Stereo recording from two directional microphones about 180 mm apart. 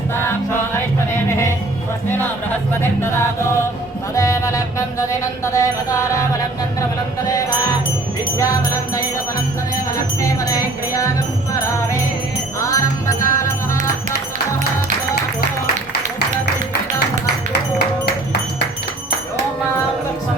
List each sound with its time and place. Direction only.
0.3 s music: 15° left (ahead or behind)
2.0 s music: 10° left (ahead or behind)
4.1 s music: 15° left (ahead or behind)
8.4 s music: 15° left (ahead or behind)
10.2 s music: 20° left (ahead or behind)
12.5 s music: 20° left (ahead or behind)